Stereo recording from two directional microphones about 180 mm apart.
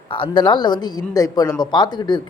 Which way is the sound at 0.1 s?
30° left (ahead or behind).